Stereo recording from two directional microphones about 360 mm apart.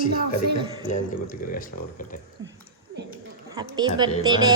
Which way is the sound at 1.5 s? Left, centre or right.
Left.